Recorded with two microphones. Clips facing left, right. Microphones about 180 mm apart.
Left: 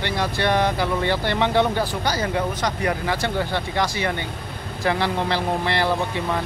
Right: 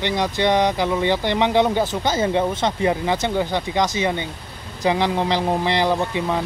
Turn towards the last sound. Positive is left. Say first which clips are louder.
# right 2 dB
turn(degrees=-15)  # may be behind; listen again after turning